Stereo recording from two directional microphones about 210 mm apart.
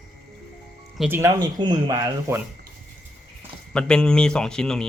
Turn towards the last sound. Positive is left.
turn(degrees=5)  # may be behind; listen again after turning